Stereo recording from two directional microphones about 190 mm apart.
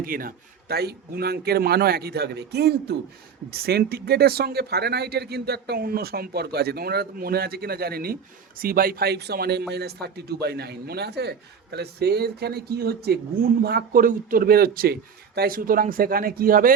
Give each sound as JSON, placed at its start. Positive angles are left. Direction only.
{"t": 0.0, "sound": "speech", "side_deg": -50}